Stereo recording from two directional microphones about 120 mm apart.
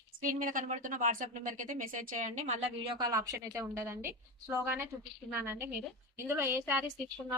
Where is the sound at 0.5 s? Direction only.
90° right.